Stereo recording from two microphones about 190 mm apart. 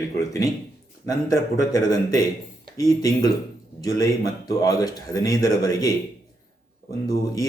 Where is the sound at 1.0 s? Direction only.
15° left (ahead or behind).